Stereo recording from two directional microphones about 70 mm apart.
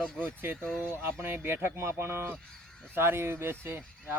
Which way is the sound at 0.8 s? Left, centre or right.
Right.